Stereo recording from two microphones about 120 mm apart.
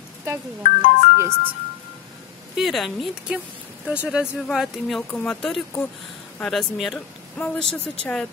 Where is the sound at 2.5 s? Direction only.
Centre (ahead or behind).